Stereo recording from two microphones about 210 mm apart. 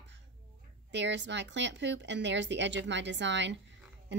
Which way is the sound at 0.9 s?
55° right (ahead or behind).